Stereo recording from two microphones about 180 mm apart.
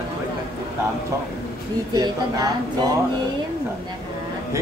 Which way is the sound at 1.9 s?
20° right (ahead or behind).